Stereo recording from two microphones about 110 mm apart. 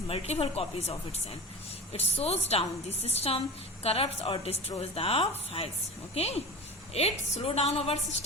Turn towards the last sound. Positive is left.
turn(degrees=70)  # may be behind; listen again after turning